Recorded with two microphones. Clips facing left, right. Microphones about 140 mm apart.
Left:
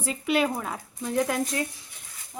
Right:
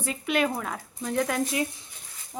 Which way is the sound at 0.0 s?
Centre (ahead or behind).